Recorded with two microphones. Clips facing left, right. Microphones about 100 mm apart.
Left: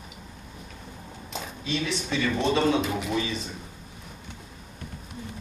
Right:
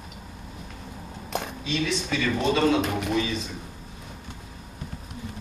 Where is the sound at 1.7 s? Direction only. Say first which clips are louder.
Right 1 dB; 25° left (ahead or behind).